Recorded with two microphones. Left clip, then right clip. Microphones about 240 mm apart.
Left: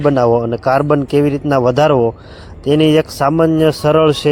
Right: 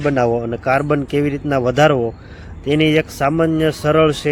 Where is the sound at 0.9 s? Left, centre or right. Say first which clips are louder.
Left 5 dB; centre.